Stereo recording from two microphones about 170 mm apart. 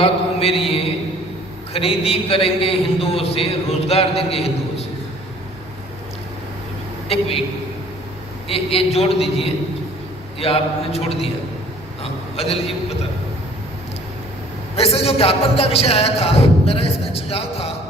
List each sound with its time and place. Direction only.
0.0 s mantra: 35° left (ahead or behind)
1.7 s a man's voice: 35° left (ahead or behind)
7.1 s a man's voice: 35° left (ahead or behind)
8.4 s a man's voice: 35° left (ahead or behind)
12.4 s a man's voice: 35° left (ahead or behind)
14.8 s a man's voice: 35° left (ahead or behind)